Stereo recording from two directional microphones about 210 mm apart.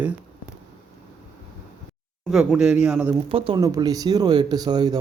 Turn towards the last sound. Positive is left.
turn(degrees=-20)  # may be behind; listen again after turning